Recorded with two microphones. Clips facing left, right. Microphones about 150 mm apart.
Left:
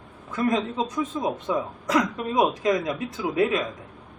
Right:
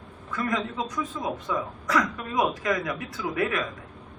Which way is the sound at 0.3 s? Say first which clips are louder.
Left 4 dB; 25° left (ahead or behind).